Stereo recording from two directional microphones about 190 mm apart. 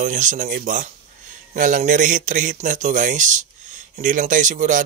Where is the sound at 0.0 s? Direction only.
45° right (ahead or behind).